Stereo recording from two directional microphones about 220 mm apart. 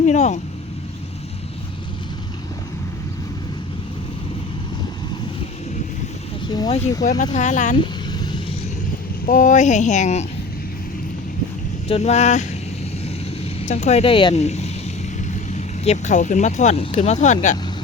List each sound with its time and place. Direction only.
0.0 s speech: 30° left (ahead or behind)
6.5 s speech: 20° left (ahead or behind)
7.8 s vehicle: 20° left (ahead or behind)
9.2 s speech: 35° left (ahead or behind)
11.9 s speech: 30° left (ahead or behind)